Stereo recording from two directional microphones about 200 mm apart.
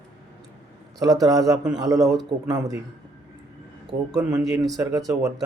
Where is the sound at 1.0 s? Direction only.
15° right (ahead or behind).